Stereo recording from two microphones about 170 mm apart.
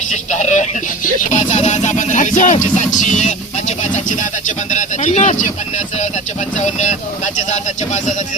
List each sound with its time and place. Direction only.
0.1 s music: 45° left (ahead or behind)
6.6 s music: 45° left (ahead or behind)